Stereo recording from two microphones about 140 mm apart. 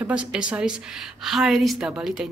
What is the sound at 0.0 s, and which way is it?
Speech, 5° right (ahead or behind).